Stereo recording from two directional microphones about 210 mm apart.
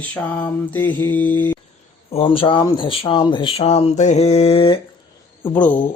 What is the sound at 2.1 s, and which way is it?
Speech, 25° left (ahead or behind).